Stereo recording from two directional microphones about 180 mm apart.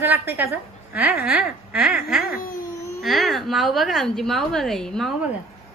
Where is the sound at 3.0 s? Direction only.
Centre (ahead or behind).